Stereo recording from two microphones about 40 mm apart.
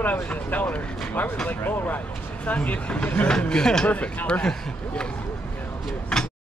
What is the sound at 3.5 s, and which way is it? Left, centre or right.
Speech, centre.